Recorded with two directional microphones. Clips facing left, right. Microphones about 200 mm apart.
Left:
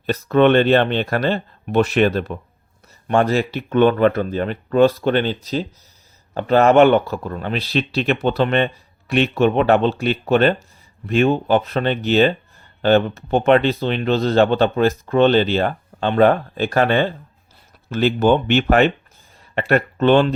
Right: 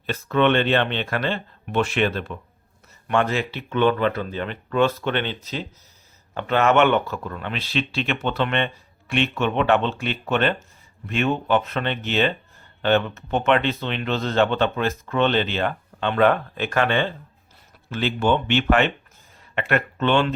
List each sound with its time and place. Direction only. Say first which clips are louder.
0.0 s speech: left 6 dB; 40° left (ahead or behind)